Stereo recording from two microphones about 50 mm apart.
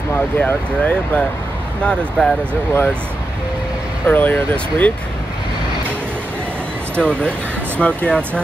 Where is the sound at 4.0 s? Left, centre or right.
Left.